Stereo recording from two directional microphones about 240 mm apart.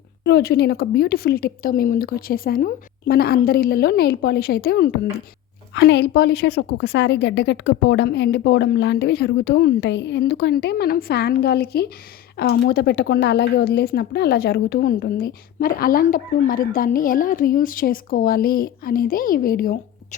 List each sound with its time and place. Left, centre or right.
0.3 s a woman's voice: left